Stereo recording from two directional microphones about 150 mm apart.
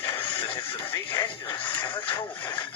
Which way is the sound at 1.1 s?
35° left (ahead or behind).